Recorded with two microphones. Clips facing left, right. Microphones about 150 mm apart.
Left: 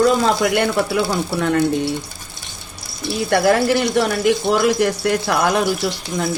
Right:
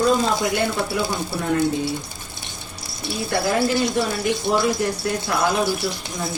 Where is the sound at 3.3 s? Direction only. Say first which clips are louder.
Left 5 dB; 70° left (ahead or behind).